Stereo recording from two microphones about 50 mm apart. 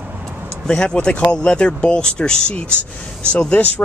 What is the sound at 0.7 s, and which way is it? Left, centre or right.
Speech, centre.